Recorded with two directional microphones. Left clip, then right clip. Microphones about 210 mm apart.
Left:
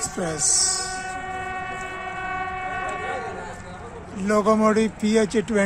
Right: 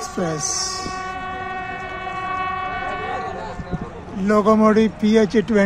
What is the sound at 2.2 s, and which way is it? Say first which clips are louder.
Train: right 5 dB; centre (ahead or behind).